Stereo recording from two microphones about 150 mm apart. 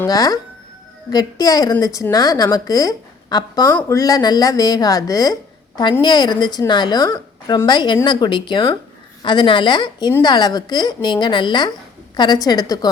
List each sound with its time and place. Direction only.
0.0 s a woman's voice: 25° left (ahead or behind)